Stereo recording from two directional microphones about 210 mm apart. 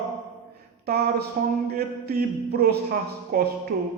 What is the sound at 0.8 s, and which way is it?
Mantra, 50° right (ahead or behind).